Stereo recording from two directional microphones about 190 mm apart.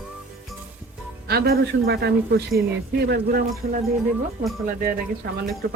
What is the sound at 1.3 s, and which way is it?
Speech, 55° right (ahead or behind).